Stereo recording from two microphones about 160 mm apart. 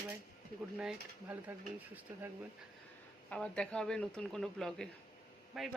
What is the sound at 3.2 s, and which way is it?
Speech, 5° left (ahead or behind).